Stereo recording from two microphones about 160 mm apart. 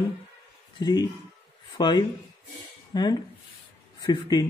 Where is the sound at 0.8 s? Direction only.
25° left (ahead or behind).